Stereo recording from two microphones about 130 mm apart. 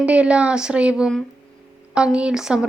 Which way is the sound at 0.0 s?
10° right (ahead or behind).